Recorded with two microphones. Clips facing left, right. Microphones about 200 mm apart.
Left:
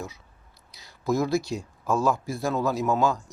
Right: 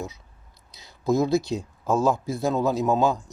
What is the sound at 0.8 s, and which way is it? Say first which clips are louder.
Speech: right 3 dB; 20° right (ahead or behind).